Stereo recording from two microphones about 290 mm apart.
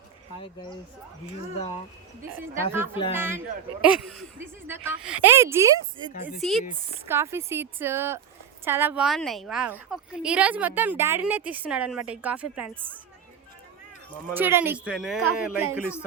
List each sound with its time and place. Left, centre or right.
0.4 s speech: centre
2.7 s a woman's voice: centre
14.1 s a woman's voice: centre